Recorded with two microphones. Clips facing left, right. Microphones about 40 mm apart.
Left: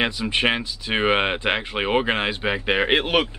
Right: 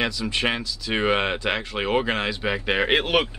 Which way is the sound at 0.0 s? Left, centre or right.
Left.